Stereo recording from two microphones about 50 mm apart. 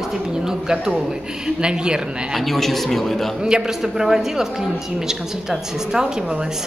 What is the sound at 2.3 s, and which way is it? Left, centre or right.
Speech, centre.